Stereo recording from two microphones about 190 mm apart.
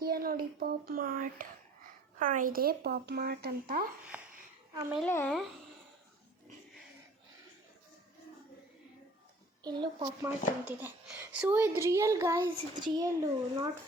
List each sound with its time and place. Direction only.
0.0 s a sound: 50° right (ahead or behind)
2.1 s speech: 45° right (ahead or behind)
4.1 s a sound: 5° right (ahead or behind)
4.7 s a woman's voice: 15° right (ahead or behind)
4.9 s speech: 10° left (ahead or behind)
9.6 s a child's voice: 20° right (ahead or behind)
10.2 s a woman's voice: 10° right (ahead or behind)